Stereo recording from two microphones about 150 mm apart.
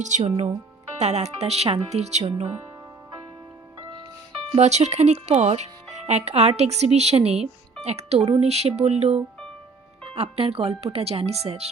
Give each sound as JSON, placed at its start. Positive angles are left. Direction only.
{"t": 0.0, "sound": "speech", "side_deg": -50}
{"t": 4.5, "sound": "speech", "side_deg": -45}